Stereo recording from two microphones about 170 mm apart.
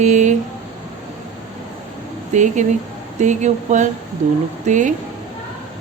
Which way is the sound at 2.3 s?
45° right (ahead or behind).